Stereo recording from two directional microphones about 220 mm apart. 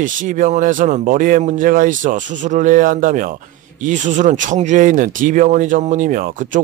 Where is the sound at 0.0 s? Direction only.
35° right (ahead or behind).